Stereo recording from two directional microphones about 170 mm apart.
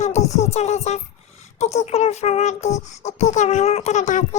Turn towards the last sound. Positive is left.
turn(degrees=45)  # may be behind; listen again after turning